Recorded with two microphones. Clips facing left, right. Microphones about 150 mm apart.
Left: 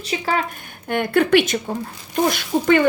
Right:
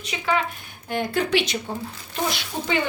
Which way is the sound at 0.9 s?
60° left (ahead or behind).